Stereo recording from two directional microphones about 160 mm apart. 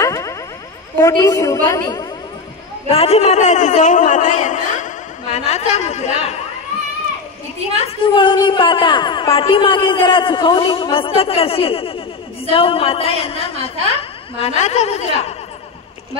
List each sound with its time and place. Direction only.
0.0 s a sound: 20° left (ahead or behind)
0.9 s a woman's voice: 20° left (ahead or behind)
2.9 s a man's voice: 40° left (ahead or behind)
7.8 s speech: 30° left (ahead or behind)